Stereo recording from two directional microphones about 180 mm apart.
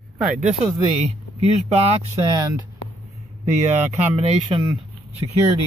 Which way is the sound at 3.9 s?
35° right (ahead or behind).